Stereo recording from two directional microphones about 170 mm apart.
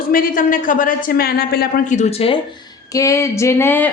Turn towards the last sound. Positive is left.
turn(degrees=10)  # may be behind; listen again after turning